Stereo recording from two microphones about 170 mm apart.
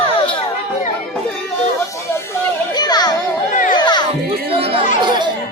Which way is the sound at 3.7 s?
25° left (ahead or behind).